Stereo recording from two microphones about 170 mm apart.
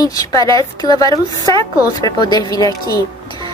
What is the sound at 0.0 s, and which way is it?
A woman's voice, 20° left (ahead or behind).